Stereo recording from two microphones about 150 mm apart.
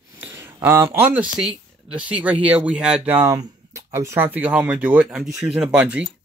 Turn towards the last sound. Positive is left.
turn(degrees=-5)  # may be behind; listen again after turning